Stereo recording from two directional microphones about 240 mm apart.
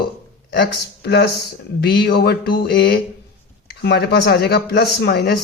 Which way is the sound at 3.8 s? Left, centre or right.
Left.